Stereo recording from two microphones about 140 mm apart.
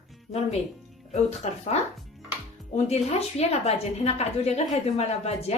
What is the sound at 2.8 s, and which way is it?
A woman's voice, 50° left (ahead or behind).